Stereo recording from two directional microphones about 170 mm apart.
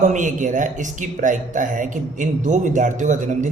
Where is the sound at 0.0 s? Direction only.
50° right (ahead or behind).